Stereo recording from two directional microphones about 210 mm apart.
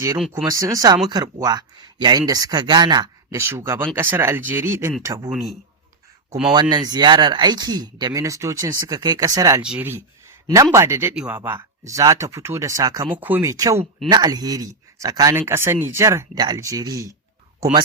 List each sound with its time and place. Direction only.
0.4 s speech: 15° right (ahead or behind)
5.3 s a man's voice: centre (ahead or behind)
6.5 s speech: 20° right (ahead or behind)